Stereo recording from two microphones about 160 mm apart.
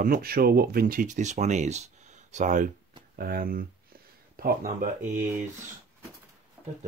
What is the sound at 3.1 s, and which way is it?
Speech, 70° right (ahead or behind).